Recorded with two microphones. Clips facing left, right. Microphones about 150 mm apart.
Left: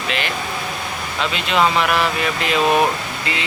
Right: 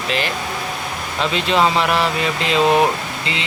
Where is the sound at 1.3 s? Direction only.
30° right (ahead or behind).